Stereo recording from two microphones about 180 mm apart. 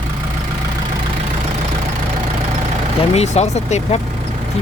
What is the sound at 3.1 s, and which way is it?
Speech, 35° left (ahead or behind).